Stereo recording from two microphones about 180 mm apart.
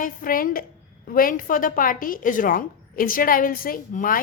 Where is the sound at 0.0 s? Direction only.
50° left (ahead or behind).